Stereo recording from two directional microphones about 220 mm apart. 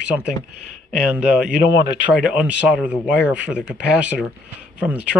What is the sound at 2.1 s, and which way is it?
Speech, 5° right (ahead or behind).